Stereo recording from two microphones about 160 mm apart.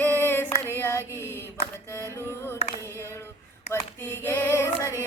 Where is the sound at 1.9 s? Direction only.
15° left (ahead or behind).